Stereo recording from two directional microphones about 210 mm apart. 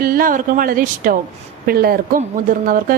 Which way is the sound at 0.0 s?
45° right (ahead or behind).